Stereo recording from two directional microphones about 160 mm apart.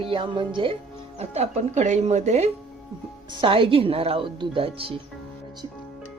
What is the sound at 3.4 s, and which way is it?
Speech, 35° right (ahead or behind).